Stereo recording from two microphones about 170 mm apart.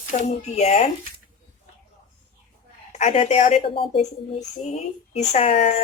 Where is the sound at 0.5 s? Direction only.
40° left (ahead or behind).